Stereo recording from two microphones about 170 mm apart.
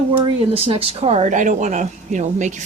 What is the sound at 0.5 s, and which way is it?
Speech, 35° right (ahead or behind).